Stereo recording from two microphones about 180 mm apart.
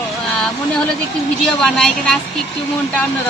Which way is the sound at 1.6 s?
5° left (ahead or behind).